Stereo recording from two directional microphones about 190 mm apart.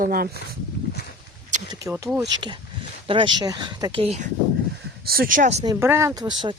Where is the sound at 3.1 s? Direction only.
25° right (ahead or behind).